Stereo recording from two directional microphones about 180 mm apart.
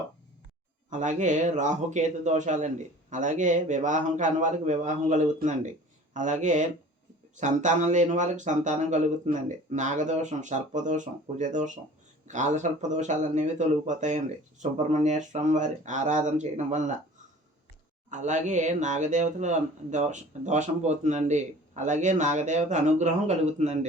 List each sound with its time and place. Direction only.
0.9 s speech: 45° right (ahead or behind)
18.1 s speech: 40° right (ahead or behind)